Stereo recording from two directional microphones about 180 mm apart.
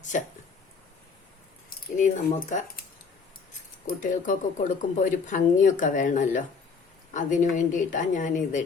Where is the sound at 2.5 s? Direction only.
45° left (ahead or behind).